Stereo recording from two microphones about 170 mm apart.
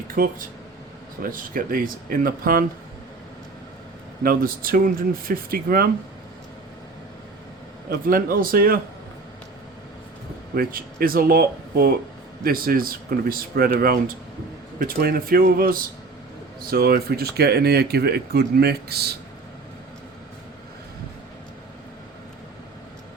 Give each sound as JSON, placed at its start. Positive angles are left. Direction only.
{"t": 0.1, "sound": "speech", "side_deg": -55}
{"t": 4.2, "sound": "speech", "side_deg": -60}
{"t": 7.9, "sound": "speech", "side_deg": -60}
{"t": 10.5, "sound": "speech", "side_deg": -60}